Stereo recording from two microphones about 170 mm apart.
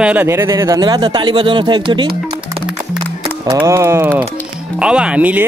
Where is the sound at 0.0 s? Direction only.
10° right (ahead or behind); by 2.1 s 25° right (ahead or behind).